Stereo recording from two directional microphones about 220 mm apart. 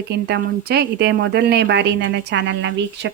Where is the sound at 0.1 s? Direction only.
50° right (ahead or behind).